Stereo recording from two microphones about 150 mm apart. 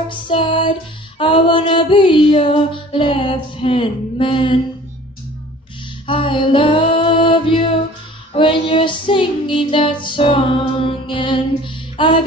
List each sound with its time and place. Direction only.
0.1 s female singing: 35° left (ahead or behind)
6.0 s female singing: 35° left (ahead or behind)
8.3 s child singing: 35° left (ahead or behind)